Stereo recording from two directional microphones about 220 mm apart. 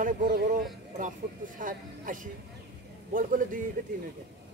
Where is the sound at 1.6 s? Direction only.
35° right (ahead or behind).